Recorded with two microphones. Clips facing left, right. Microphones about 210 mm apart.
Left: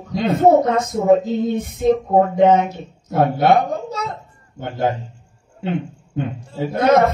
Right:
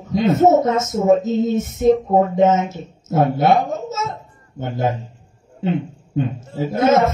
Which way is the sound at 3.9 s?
25° right (ahead or behind).